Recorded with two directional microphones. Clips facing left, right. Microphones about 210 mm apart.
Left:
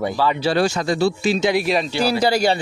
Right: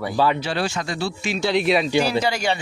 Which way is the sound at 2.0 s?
35° left (ahead or behind).